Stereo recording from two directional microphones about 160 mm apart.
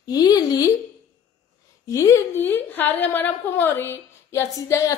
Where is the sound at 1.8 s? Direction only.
20° left (ahead or behind).